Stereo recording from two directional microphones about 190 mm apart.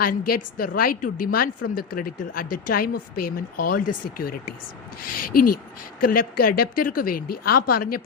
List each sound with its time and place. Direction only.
0.0 s a woman's voice: 50° left (ahead or behind)